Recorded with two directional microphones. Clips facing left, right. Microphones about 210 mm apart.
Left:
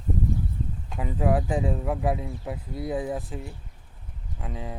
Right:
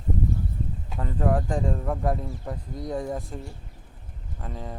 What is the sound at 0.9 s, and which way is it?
Speech, 10° left (ahead or behind).